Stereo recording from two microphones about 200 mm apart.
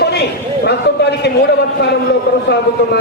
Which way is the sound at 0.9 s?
55° left (ahead or behind).